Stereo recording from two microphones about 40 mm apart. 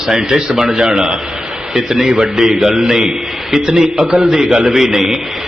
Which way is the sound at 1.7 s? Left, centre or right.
Centre.